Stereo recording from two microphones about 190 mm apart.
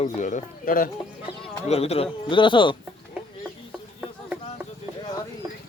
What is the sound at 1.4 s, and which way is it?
Speech, 30° left (ahead or behind).